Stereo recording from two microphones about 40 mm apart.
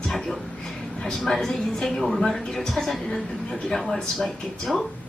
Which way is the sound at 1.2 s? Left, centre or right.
Centre.